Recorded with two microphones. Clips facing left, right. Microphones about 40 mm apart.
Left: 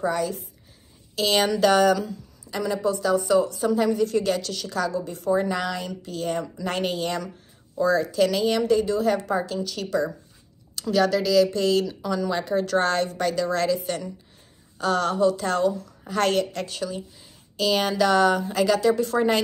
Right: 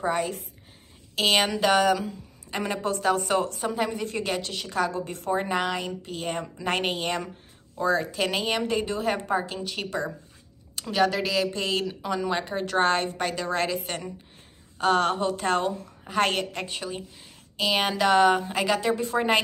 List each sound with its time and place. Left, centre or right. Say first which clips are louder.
0.0 s a woman's voice: left 2 dB; right
1.4 s speech: left 3 dB; centre
2.5 s a woman's voice: left 3 dB; right
3.6 s a woman's voice: left 6 dB; right
4.9 s a woman's voice: left 4 dB; right